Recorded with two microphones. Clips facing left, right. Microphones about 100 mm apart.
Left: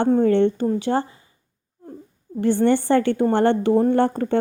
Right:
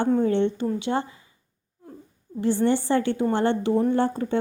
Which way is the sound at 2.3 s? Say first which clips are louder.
Left 4 dB; 55° left (ahead or behind).